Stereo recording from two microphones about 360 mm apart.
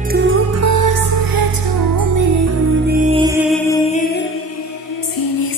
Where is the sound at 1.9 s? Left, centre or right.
Right.